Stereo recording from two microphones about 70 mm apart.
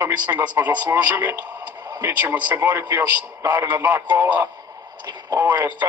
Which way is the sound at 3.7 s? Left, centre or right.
Right.